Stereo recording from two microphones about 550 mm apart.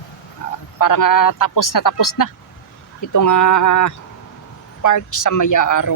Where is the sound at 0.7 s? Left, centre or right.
Left.